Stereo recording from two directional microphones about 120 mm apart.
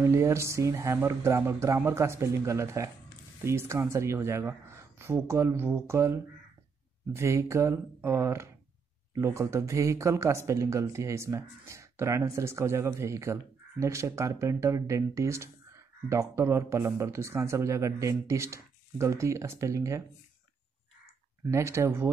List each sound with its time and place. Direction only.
0.0 s speech: 25° right (ahead or behind)
21.5 s speech: 25° right (ahead or behind)